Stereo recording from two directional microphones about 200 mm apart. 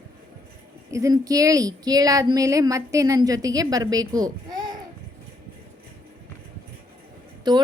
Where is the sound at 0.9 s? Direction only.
15° right (ahead or behind).